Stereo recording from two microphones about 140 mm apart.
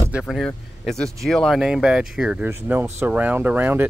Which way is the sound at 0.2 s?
5° left (ahead or behind).